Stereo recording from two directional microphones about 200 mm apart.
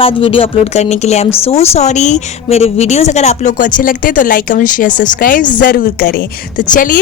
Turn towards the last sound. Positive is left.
turn(degrees=40)  # may be behind; listen again after turning